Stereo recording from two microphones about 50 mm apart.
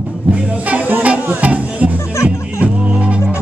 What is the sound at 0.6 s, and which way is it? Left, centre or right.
Music, right.